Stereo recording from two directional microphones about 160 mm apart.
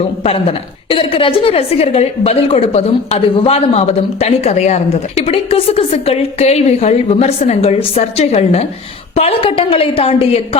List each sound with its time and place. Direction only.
0.3 s a woman's voice: 35° left (ahead or behind)